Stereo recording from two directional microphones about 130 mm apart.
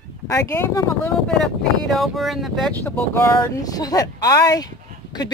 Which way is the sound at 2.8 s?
20° left (ahead or behind).